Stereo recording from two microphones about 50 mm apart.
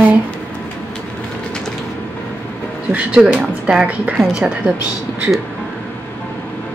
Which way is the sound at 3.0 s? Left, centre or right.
Right.